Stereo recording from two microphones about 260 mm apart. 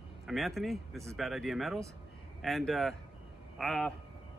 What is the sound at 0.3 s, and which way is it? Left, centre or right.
Speech, centre.